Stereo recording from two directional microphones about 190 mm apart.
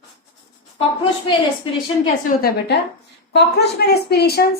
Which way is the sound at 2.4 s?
55° left (ahead or behind).